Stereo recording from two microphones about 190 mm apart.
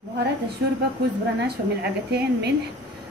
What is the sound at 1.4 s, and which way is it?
A woman's voice, 60° right (ahead or behind).